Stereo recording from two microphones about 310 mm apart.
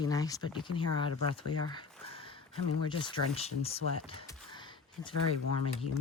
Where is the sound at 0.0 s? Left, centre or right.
Centre.